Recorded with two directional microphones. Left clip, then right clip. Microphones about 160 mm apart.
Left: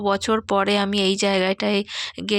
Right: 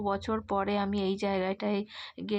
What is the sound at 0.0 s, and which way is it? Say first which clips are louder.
Speech: left 10 dB; 30° left (ahead or behind).